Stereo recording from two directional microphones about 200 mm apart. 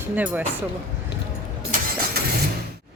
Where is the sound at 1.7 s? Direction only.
40° right (ahead or behind).